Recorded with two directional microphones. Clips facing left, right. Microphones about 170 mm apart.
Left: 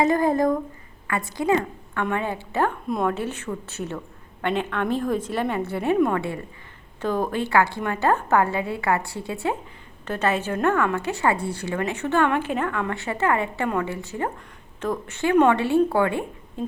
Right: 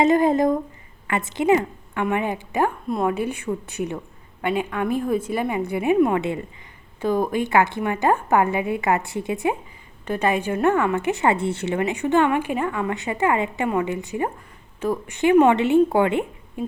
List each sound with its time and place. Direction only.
0.0 s a woman's voice: 20° right (ahead or behind)